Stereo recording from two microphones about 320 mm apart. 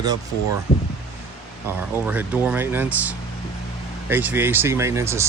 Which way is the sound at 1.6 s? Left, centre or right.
Centre.